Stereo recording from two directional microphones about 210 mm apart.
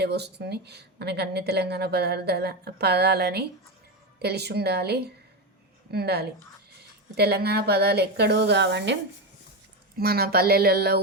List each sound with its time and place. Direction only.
0.0 s speech: 50° right (ahead or behind)
10.0 s speech: 45° right (ahead or behind)